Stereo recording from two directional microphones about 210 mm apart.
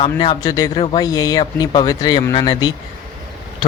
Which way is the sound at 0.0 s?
25° left (ahead or behind).